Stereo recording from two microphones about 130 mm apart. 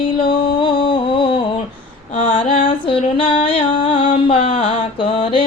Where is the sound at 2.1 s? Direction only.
40° left (ahead or behind).